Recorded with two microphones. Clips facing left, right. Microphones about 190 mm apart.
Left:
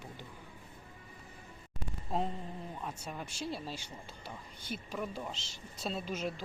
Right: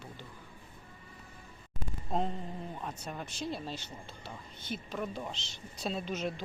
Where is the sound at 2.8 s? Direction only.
5° left (ahead or behind).